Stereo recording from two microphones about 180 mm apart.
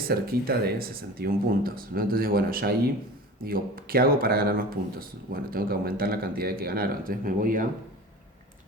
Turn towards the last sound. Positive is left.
turn(degrees=-50)  # may be behind; listen again after turning